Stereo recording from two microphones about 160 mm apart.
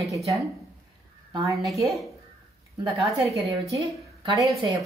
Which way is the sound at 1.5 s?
Centre (ahead or behind).